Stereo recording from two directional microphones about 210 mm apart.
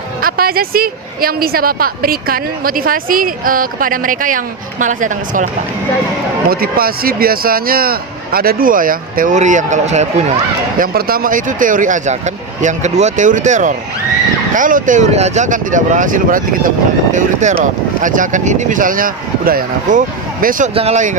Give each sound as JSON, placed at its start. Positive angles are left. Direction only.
{"t": 0.2, "sound": "a woman's voice", "side_deg": -45}
{"t": 6.5, "sound": "a woman's voice", "side_deg": -45}
{"t": 10.8, "sound": "speech", "side_deg": -45}